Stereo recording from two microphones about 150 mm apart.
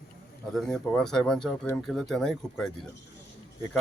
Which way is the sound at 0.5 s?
5° left (ahead or behind).